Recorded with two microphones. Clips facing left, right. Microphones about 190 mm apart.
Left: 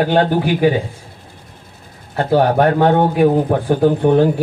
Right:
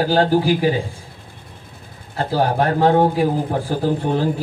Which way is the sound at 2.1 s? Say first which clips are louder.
Left 6 dB; 65° left (ahead or behind).